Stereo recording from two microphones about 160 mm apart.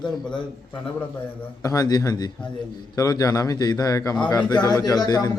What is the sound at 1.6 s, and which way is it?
A man's voice, 20° left (ahead or behind).